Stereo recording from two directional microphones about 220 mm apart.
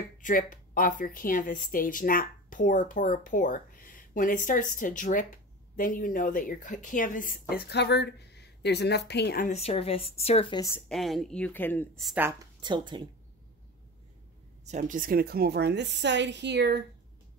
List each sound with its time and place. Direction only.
0.2 s speech: 35° left (ahead or behind)
9.5 s speech: 30° left (ahead or behind)
10.9 s a woman's voice: centre (ahead or behind)
12.5 s speech: 20° right (ahead or behind)
14.6 s a woman's voice: 35° right (ahead or behind); by 16.8 s 50° right (ahead or behind)